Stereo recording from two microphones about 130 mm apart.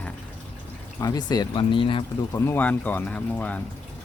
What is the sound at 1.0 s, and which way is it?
Speech, 30° left (ahead or behind).